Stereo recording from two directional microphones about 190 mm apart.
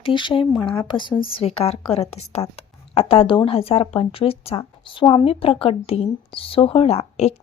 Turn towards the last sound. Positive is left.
turn(degrees=35)  # may be behind; listen again after turning